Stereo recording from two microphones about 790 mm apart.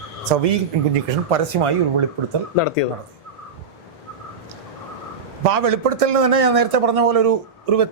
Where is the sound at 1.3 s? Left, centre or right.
Right.